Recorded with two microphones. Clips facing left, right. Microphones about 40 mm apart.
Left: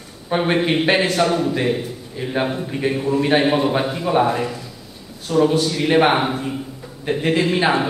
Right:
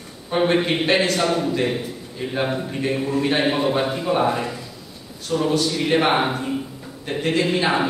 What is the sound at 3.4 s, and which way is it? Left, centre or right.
A man's voice, centre.